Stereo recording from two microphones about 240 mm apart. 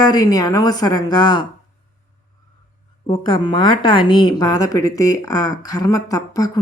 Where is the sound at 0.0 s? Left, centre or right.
Centre.